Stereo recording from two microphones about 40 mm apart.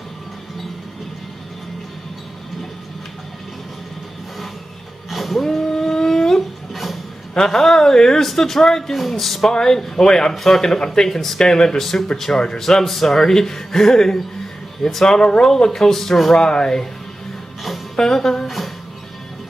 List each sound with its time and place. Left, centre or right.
5.1 s a sound: centre
5.4 s a sound: centre
7.4 s speech: centre
9.5 s speech: centre
16.3 s speech: centre
17.9 s a woman's voice: centre